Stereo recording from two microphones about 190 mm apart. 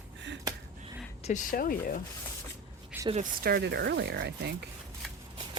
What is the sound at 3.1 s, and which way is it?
Speech, 50° right (ahead or behind).